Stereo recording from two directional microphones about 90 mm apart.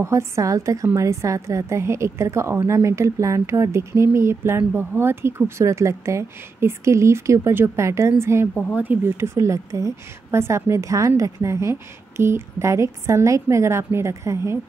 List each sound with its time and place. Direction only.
0.0 s a woman's voice: 30° right (ahead or behind)